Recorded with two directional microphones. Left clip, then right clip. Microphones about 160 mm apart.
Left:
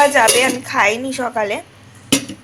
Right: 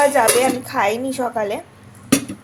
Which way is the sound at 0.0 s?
5° right (ahead or behind).